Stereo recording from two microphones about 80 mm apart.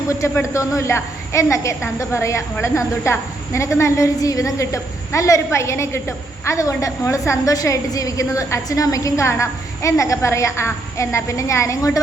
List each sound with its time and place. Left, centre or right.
0.1 s a woman's voice: left